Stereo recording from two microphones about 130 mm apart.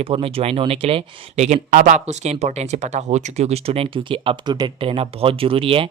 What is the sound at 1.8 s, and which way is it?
Speech, 70° right (ahead or behind).